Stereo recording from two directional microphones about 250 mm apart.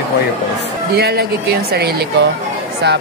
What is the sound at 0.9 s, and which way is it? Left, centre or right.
Speech, right.